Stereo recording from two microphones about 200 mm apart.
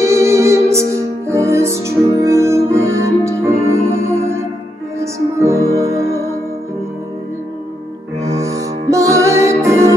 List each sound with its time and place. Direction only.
0.0 s music: 15° right (ahead or behind)
8.4 s music: 15° right (ahead or behind)